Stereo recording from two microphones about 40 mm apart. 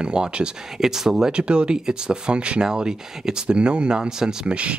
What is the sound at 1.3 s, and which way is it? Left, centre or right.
Speech, right.